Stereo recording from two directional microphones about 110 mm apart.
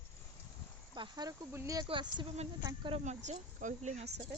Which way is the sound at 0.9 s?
40° right (ahead or behind).